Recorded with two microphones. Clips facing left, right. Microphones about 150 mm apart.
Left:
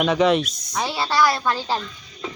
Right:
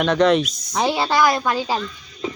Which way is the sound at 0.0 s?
5° left (ahead or behind).